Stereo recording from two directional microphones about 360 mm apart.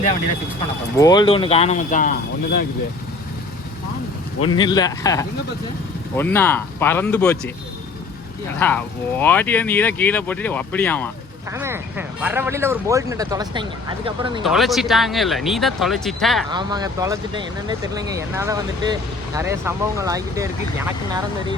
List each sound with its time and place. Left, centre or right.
0.9 s speech: centre
4.5 s speech: centre
8.5 s speech: centre
11.5 s speech: centre
14.4 s speech: centre
16.5 s speech: centre